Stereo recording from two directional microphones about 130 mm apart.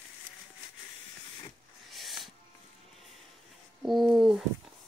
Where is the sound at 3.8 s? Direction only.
Centre (ahead or behind).